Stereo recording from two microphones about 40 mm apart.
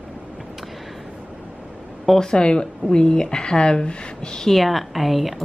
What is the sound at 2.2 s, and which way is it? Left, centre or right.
Speech, left.